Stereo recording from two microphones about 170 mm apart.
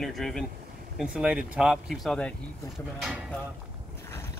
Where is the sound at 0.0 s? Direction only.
Centre (ahead or behind).